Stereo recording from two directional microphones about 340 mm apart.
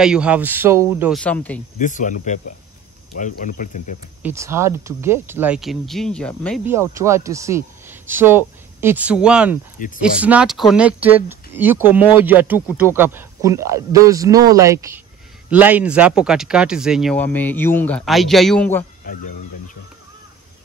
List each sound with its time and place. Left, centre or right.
0.0 s speech: centre
1.8 s speech: left
4.2 s speech: centre